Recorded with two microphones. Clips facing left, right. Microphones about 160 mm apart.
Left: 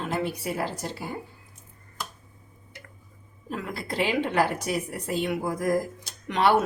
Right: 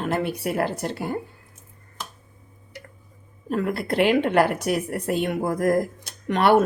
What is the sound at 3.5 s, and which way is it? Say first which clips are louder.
A woman's voice: right 8 dB; 55° right (ahead or behind).